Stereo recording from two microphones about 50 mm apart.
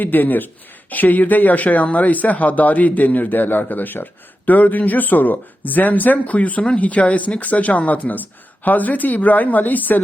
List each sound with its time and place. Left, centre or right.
0.0 s speech: left